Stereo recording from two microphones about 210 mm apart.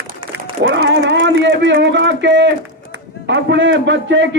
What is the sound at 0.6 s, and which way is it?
Speech, 60° right (ahead or behind).